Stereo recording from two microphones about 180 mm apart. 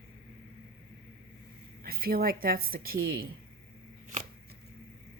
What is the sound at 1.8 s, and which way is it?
A woman's voice, 55° right (ahead or behind).